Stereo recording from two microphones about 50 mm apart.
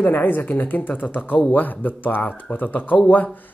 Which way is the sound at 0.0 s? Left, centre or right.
Left.